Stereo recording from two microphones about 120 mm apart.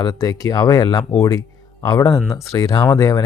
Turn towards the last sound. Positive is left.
turn(degrees=30)  # may be behind; listen again after turning